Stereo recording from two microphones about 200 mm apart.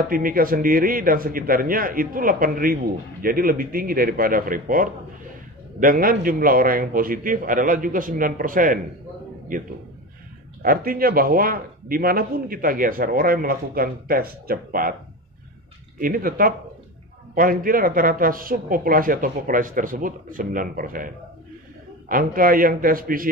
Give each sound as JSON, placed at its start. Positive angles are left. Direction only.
{"t": 0.1, "sound": "a man's voice", "side_deg": -45}
{"t": 10.6, "sound": "a man's voice", "side_deg": -45}
{"t": 16.0, "sound": "a man's voice", "side_deg": -45}
{"t": 22.1, "sound": "a man's voice", "side_deg": -45}